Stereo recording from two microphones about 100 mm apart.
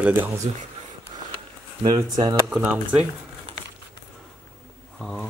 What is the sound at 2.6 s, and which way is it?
Speech, 15° right (ahead or behind).